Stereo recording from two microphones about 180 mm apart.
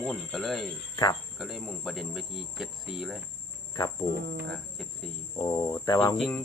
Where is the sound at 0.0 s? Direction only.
5° left (ahead or behind).